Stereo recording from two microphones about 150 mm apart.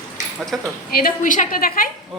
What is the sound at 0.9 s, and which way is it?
A woman's voice, 80° left.